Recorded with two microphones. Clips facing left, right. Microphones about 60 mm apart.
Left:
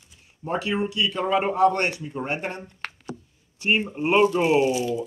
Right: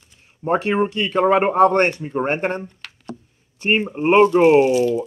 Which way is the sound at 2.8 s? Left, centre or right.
Left.